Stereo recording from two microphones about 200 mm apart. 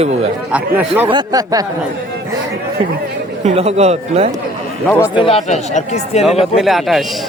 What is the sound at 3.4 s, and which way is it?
Speech, 30° right (ahead or behind).